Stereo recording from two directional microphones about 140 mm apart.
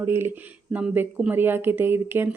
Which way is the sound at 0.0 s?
15° right (ahead or behind).